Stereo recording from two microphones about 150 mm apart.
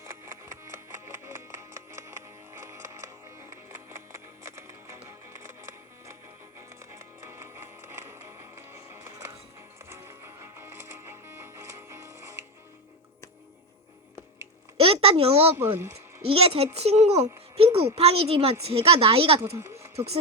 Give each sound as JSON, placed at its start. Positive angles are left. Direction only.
{"t": 0.0, "sound": "music", "side_deg": -20}
{"t": 14.8, "sound": "a sound", "side_deg": -40}
{"t": 15.5, "sound": "speech", "side_deg": -15}
{"t": 16.2, "sound": "speech", "side_deg": -40}
{"t": 19.4, "sound": "speech", "side_deg": -20}